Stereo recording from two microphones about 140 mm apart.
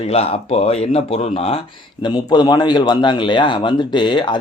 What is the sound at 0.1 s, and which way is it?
Speech, 45° left (ahead or behind).